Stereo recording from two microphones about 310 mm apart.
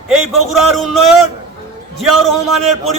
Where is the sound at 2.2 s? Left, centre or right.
Centre.